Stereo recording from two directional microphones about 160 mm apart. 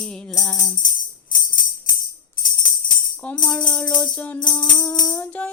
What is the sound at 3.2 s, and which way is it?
Speech, 10° left (ahead or behind).